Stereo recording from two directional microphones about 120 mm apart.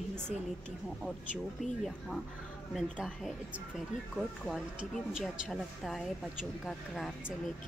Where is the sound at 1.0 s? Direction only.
Centre (ahead or behind).